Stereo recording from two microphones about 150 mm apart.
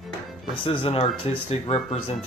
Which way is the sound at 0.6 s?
40° left (ahead or behind).